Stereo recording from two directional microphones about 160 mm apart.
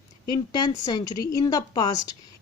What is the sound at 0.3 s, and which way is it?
Speech, 25° left (ahead or behind).